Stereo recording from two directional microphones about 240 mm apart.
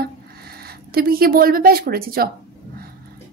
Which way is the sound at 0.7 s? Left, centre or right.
Right.